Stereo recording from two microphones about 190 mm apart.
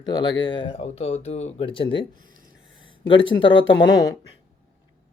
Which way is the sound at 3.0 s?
25° left (ahead or behind).